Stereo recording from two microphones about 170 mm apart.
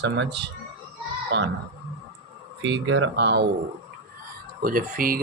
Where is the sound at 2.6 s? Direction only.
90° right.